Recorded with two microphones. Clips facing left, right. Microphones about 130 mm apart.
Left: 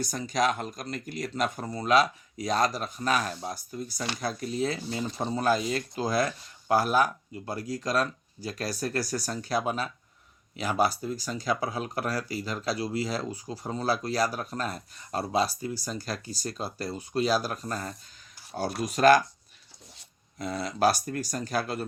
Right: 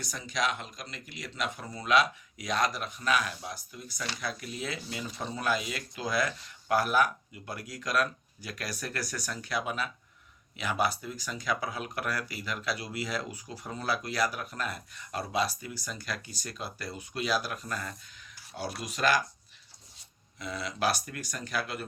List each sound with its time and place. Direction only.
0.0 s speech: 40° left (ahead or behind)
20.4 s speech: 40° left (ahead or behind)